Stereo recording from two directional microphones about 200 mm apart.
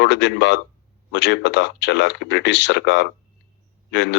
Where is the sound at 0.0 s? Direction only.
60° left (ahead or behind).